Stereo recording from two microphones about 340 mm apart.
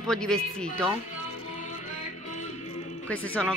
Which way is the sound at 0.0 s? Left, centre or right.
Centre.